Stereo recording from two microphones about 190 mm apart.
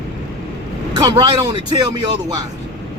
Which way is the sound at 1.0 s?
20° right (ahead or behind).